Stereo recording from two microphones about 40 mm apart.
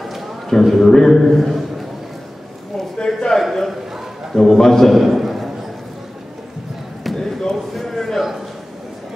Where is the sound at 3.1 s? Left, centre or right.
Centre.